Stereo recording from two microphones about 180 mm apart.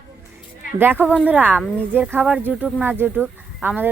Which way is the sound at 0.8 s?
10° right (ahead or behind).